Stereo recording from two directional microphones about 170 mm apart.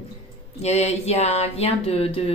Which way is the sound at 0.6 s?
40° left (ahead or behind).